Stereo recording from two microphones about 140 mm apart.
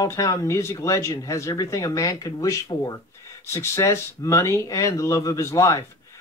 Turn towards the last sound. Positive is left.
turn(degrees=25)  # may be behind; listen again after turning